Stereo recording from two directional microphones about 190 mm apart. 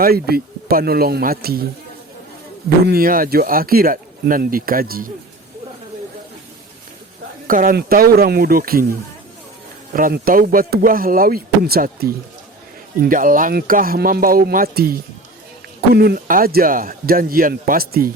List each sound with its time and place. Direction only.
0.0 s speech: 55° right (ahead or behind)
2.6 s speech: 55° right (ahead or behind)
7.4 s speech: 45° right (ahead or behind)
16.0 s speech: 50° right (ahead or behind)